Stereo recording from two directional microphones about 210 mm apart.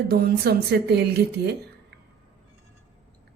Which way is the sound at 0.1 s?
45° right (ahead or behind).